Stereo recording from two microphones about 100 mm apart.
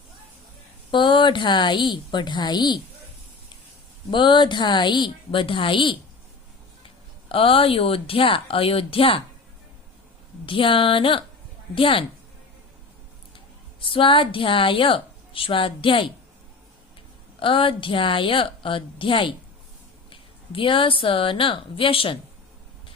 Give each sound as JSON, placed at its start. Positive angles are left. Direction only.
{"t": 0.9, "sound": "a woman's voice", "side_deg": 55}
{"t": 4.1, "sound": "a woman's voice", "side_deg": 50}
{"t": 7.3, "sound": "a woman's voice", "side_deg": 65}
{"t": 10.4, "sound": "a woman's voice", "side_deg": 60}
{"t": 13.3, "sound": "speech", "side_deg": 60}
{"t": 17.4, "sound": "a woman's voice", "side_deg": 60}